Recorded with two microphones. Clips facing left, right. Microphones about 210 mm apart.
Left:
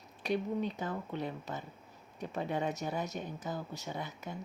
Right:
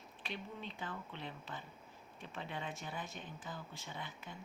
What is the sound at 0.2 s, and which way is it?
A woman's voice, 40° left (ahead or behind).